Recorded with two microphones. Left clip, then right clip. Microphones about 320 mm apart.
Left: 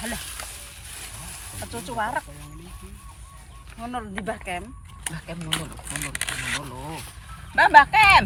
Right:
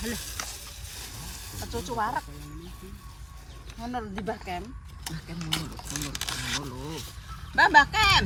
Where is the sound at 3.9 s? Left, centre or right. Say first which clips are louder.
Left 2 dB; centre.